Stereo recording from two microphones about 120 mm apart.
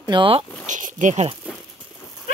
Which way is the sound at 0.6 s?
90° right.